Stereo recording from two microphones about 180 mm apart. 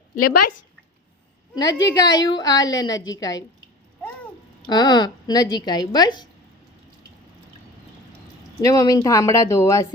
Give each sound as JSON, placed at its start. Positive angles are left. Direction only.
{"t": 1.5, "sound": "speech", "side_deg": 20}
{"t": 4.6, "sound": "speech", "side_deg": 25}
{"t": 8.6, "sound": "speech", "side_deg": 20}